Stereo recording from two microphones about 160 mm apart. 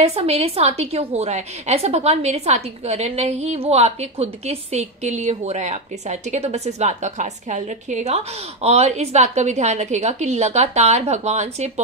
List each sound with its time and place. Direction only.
0.0 s a woman's voice: 40° right (ahead or behind)